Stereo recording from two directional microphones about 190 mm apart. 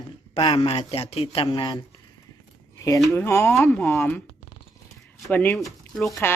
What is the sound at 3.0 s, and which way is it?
A woman's voice, 10° left (ahead or behind).